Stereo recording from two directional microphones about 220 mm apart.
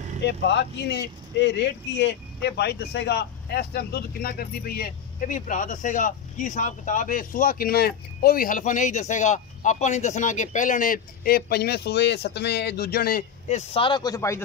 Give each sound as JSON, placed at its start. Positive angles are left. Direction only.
{"t": 0.2, "sound": "speech", "side_deg": 50}